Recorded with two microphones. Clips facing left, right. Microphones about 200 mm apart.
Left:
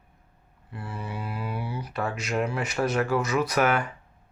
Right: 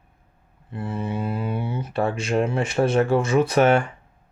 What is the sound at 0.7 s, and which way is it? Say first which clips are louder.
A man's voice: right 8 dB; 25° right (ahead or behind).